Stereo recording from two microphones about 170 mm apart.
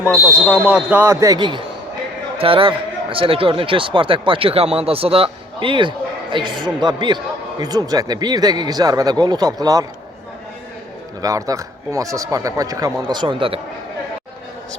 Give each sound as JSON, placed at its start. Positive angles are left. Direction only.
{"t": 0.4, "sound": "speech", "side_deg": -5}
{"t": 11.2, "sound": "speech", "side_deg": -20}